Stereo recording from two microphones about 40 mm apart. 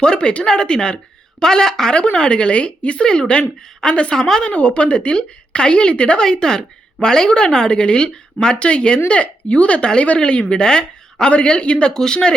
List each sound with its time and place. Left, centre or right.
0.0 s a woman's voice: left
2.1 s a woman's voice: left
6.3 s a woman's voice: centre